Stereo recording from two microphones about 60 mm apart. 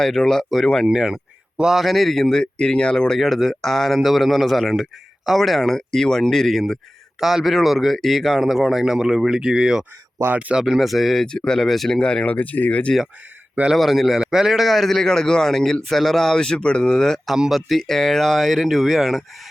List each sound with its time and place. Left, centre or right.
0.0 s a man's voice: centre
0.9 s a man's voice: centre
3.2 s a man's voice: centre
10.3 s speech: right
10.6 s a man's voice: centre
11.9 s speech: centre
13.7 s a man's voice: centre
17.2 s a man's voice: centre